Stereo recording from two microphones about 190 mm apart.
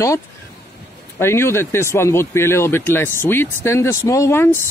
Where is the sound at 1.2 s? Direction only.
15° left (ahead or behind).